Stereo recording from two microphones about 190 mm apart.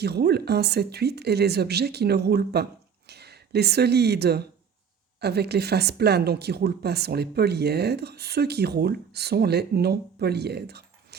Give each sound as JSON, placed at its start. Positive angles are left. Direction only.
{"t": 0.0, "sound": "speech", "side_deg": -60}